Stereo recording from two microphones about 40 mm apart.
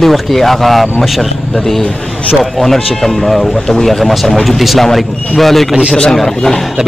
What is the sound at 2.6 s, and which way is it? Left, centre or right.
A man's voice, centre.